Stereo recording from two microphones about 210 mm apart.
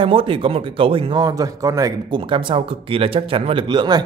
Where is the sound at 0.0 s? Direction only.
25° right (ahead or behind).